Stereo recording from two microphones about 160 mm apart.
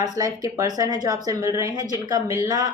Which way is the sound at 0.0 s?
20° right (ahead or behind).